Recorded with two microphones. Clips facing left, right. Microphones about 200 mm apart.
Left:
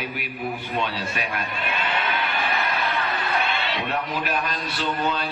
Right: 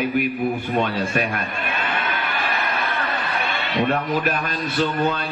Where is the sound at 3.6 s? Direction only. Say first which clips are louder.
Right 5 dB; 45° right (ahead or behind).